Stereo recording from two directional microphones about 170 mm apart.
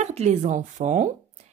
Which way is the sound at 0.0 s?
40° right (ahead or behind).